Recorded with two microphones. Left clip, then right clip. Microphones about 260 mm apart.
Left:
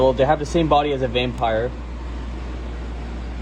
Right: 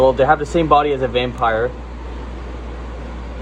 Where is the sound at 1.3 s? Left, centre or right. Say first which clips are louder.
Right 4 dB; right.